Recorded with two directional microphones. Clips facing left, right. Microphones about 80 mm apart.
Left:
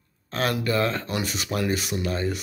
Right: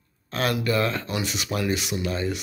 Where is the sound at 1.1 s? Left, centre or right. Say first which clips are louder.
Even; left.